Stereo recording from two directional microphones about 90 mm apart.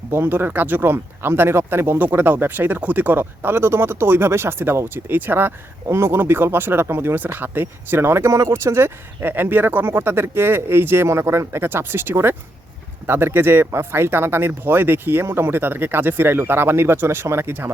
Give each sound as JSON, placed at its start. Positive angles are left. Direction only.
{"t": 0.1, "sound": "speech", "side_deg": -25}